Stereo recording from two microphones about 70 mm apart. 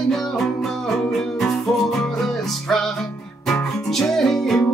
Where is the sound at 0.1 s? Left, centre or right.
Centre.